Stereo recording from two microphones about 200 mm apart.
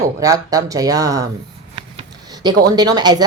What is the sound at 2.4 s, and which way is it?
Speech, 20° right (ahead or behind).